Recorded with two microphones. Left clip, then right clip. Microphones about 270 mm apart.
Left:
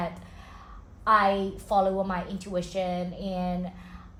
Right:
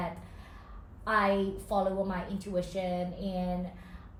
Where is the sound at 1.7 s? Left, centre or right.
Centre.